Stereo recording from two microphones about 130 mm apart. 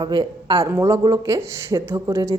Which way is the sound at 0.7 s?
20° right (ahead or behind).